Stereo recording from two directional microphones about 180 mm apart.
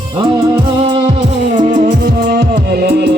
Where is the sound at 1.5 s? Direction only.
45° right (ahead or behind).